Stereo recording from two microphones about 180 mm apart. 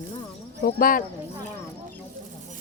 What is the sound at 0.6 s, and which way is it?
Speech, 50° left (ahead or behind).